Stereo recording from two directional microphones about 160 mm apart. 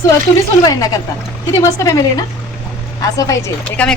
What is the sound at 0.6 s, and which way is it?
A woman's voice, 25° left (ahead or behind).